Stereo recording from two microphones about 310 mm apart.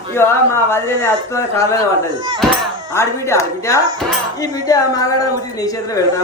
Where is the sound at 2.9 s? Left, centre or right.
Centre.